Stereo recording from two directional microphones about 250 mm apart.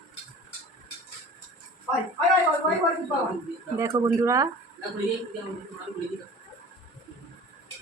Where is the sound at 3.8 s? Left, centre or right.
Centre.